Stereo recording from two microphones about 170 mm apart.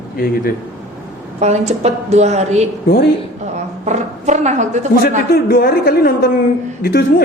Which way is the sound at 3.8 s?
45° right (ahead or behind).